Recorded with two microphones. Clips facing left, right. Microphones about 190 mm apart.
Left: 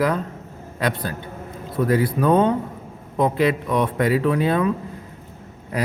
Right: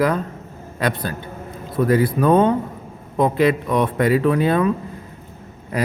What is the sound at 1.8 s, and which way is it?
A man's voice, 50° right (ahead or behind).